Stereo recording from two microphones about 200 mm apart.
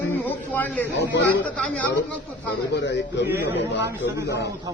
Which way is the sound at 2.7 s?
60° left (ahead or behind).